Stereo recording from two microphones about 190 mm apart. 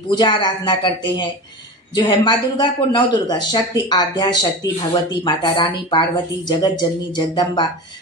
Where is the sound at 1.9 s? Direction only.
25° left (ahead or behind).